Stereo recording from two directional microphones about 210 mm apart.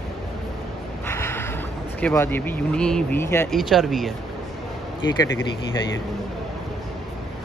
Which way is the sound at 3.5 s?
Centre (ahead or behind).